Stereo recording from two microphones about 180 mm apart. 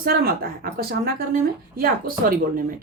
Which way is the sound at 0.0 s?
55° right (ahead or behind).